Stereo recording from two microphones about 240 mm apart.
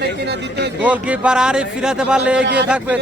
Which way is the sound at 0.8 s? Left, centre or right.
Centre.